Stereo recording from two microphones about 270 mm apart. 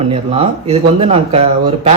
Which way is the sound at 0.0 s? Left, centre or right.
Right.